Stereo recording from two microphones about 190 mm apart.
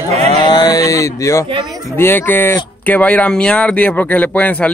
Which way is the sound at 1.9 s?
10° left (ahead or behind).